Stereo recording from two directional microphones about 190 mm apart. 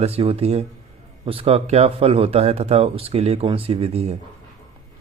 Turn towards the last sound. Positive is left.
turn(degrees=-35)  # may be behind; listen again after turning